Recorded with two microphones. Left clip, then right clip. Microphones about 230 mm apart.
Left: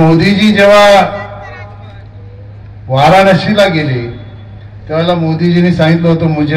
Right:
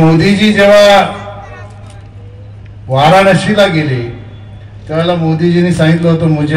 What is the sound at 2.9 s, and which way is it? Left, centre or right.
Speech, right.